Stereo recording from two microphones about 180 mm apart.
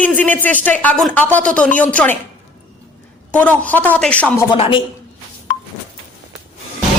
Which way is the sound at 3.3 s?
10° left (ahead or behind).